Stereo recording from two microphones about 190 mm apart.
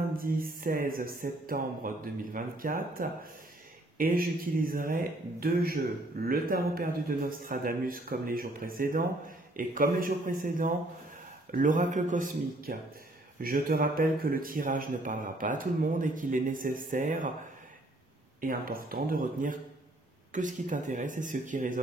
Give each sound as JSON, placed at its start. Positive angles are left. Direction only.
{"t": 0.1, "sound": "speech", "side_deg": -50}
{"t": 18.4, "sound": "speech", "side_deg": -50}